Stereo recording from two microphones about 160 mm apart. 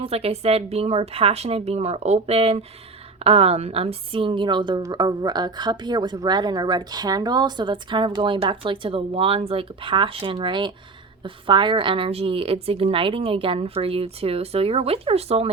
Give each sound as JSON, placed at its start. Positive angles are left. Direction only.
{"t": 0.0, "sound": "a woman's voice", "side_deg": -40}